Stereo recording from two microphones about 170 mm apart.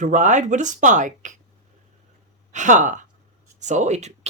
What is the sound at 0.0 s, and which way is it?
Speech, 45° right (ahead or behind).